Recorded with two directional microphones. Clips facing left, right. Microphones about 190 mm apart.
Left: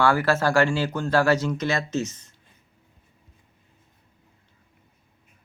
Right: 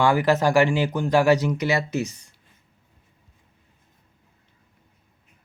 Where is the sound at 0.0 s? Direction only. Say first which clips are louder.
Right 2 dB; 15° right (ahead or behind).